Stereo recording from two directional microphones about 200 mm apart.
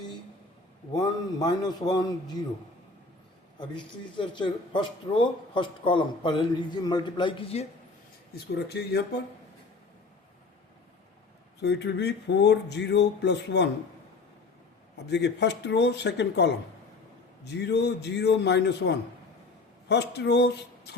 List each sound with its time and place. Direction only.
0.9 s a man's voice: 20° left (ahead or behind)
3.6 s a man's voice: 25° left (ahead or behind)
8.5 s speech: 55° left (ahead or behind)
11.6 s speech: 60° left (ahead or behind)
15.1 s speech: 60° left (ahead or behind)